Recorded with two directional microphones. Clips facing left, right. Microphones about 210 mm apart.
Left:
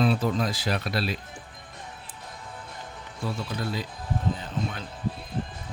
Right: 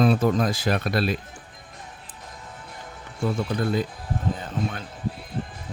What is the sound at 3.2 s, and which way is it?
Speech, 55° right (ahead or behind).